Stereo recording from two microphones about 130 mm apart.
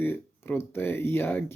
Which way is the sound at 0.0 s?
15° left (ahead or behind).